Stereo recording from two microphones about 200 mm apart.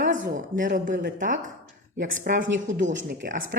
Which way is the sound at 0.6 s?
45° right (ahead or behind).